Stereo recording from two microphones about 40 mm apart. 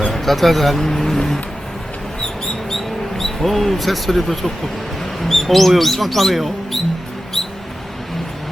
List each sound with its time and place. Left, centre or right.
0.1 s speech: centre
2.2 s bird: centre
5.2 s speech: centre